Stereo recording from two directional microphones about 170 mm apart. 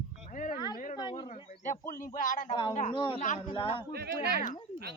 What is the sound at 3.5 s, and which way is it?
Speech, 30° left (ahead or behind).